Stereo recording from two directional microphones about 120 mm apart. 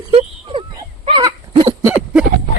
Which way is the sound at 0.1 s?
50° right (ahead or behind).